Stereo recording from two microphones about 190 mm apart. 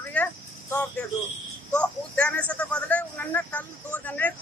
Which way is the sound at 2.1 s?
5° left (ahead or behind).